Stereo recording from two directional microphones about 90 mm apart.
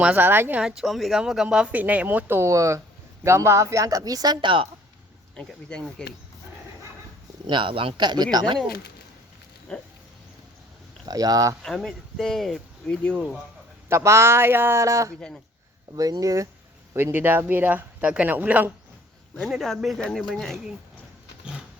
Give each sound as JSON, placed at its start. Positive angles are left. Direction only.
{"t": 0.0, "sound": "speech", "side_deg": -20}
{"t": 0.6, "sound": "speech", "side_deg": 0}
{"t": 5.4, "sound": "speech", "side_deg": 10}
{"t": 7.4, "sound": "speech", "side_deg": -70}
{"t": 9.7, "sound": "speech", "side_deg": 15}
{"t": 11.0, "sound": "speech", "side_deg": -45}
{"t": 11.6, "sound": "speech", "side_deg": 5}
{"t": 13.8, "sound": "speech", "side_deg": -30}
{"t": 16.9, "sound": "speech", "side_deg": -25}
{"t": 19.4, "sound": "speech", "side_deg": -5}